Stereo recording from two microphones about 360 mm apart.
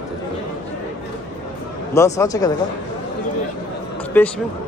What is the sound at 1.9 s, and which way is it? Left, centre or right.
Speech, centre.